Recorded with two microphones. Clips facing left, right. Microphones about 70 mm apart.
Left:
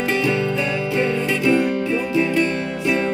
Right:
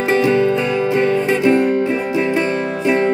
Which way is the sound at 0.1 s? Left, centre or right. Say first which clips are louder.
Right 8 dB; right.